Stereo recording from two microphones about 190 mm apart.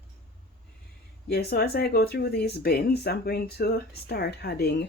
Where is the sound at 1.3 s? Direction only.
55° left (ahead or behind).